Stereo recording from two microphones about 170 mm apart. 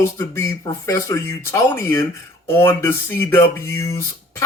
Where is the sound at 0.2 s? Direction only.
15° left (ahead or behind).